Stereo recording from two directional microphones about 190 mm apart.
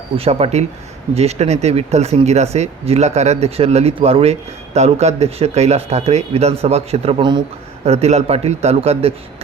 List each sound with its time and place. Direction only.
0.2 s speech: 30° right (ahead or behind)